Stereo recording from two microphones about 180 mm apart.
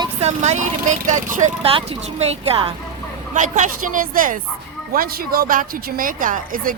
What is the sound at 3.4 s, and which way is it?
A woman's voice, 45° right (ahead or behind).